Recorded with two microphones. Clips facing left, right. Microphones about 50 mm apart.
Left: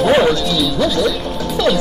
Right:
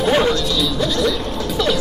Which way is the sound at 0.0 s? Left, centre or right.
Centre.